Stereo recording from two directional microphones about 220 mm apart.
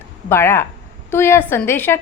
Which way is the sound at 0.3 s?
10° left (ahead or behind).